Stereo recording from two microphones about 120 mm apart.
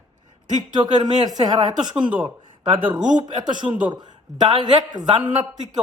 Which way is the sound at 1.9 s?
10° right (ahead or behind).